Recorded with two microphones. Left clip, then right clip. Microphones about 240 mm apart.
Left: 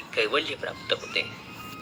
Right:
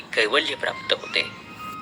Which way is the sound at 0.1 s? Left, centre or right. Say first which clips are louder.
Right 5 dB; centre.